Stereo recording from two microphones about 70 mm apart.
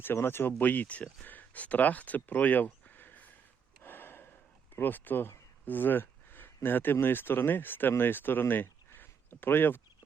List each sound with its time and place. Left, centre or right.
0.0 s speech: left
3.8 s gasp: left
4.7 s speech: left